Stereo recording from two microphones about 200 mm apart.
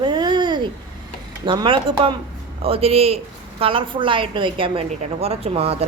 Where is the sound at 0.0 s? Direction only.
20° right (ahead or behind).